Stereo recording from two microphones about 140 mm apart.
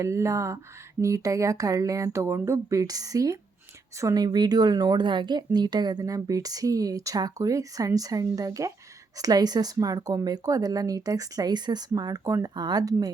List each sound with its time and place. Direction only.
0.0 s speech: 20° right (ahead or behind)